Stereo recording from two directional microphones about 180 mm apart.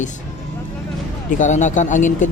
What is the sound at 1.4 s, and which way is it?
Speech, 45° left (ahead or behind).